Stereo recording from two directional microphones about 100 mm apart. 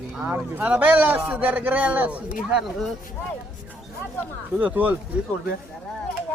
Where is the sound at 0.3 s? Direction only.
15° right (ahead or behind).